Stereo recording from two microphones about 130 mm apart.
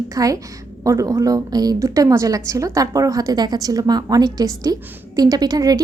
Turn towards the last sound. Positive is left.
turn(degrees=-30)  # may be behind; listen again after turning